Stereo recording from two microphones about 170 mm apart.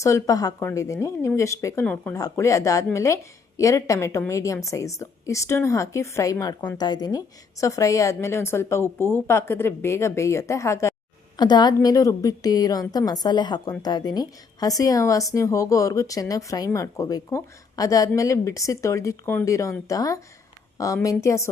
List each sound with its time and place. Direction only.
0.0 s a woman's voice: 20° left (ahead or behind)
2.1 s a woman's voice: 20° left (ahead or behind)